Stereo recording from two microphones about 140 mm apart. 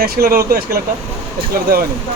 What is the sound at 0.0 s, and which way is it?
Speech, 90° right.